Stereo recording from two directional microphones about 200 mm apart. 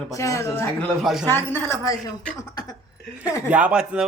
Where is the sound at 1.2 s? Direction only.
10° left (ahead or behind).